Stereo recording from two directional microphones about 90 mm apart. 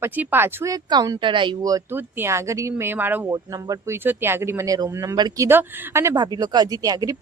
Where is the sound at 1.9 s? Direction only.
30° right (ahead or behind).